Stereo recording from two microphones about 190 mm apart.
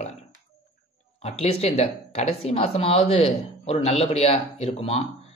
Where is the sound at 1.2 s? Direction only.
30° left (ahead or behind).